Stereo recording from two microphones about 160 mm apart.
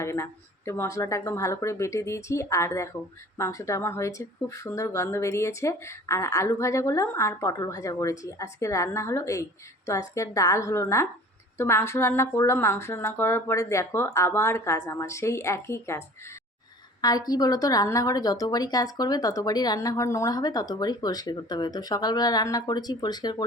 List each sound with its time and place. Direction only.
0.0 s speech: 15° left (ahead or behind)